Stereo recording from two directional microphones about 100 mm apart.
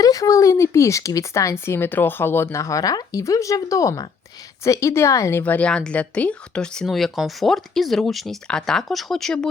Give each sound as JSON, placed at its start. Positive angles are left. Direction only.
{"t": 0.0, "sound": "a woman's voice", "side_deg": 35}
{"t": 5.4, "sound": "speech", "side_deg": 15}